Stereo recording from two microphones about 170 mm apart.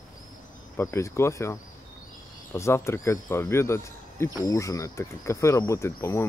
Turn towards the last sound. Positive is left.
turn(degrees=15)  # may be behind; listen again after turning